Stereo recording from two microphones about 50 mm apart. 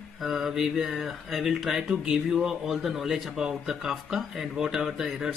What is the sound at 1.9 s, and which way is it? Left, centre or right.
A man's voice, centre.